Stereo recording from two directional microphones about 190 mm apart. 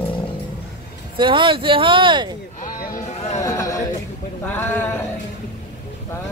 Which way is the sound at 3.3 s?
15° left (ahead or behind).